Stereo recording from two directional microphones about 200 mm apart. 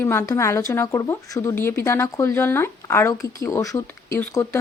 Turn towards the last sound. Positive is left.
turn(degrees=15)  # may be behind; listen again after turning